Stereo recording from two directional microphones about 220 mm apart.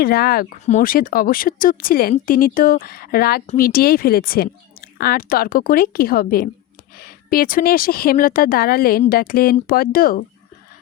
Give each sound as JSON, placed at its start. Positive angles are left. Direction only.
{"t": 0.0, "sound": "speech", "side_deg": 45}